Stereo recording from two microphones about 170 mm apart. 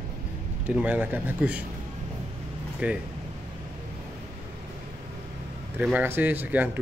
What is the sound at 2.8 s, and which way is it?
Speech, 10° right (ahead or behind).